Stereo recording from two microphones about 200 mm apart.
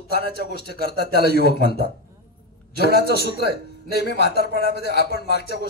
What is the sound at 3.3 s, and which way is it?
A man's voice, 55° left (ahead or behind).